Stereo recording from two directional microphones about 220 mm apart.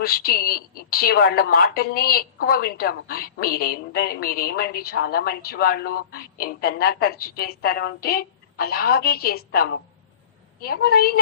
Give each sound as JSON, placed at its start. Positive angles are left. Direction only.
{"t": 0.0, "sound": "a woman's voice", "side_deg": 45}